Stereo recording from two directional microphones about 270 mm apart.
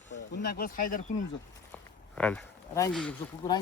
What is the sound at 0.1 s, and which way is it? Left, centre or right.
Speech, left.